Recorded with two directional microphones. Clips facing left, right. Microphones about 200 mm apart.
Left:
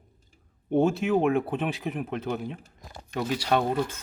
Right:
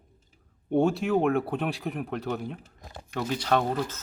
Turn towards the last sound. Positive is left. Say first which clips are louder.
# left 1 dB
turn(degrees=5)  # may be behind; listen again after turning